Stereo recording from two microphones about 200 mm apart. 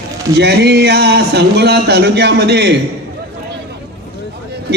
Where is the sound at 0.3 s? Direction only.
55° right (ahead or behind).